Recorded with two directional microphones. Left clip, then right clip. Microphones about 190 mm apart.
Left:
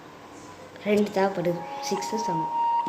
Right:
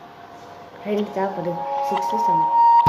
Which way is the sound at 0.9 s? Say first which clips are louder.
Even; 5° left (ahead or behind).